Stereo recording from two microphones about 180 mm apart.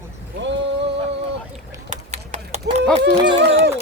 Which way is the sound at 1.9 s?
40° right (ahead or behind).